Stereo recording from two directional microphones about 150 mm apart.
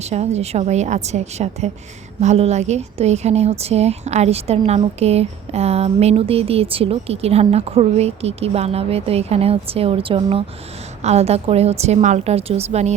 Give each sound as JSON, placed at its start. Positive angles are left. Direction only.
{"t": 0.0, "sound": "a woman's voice", "side_deg": -45}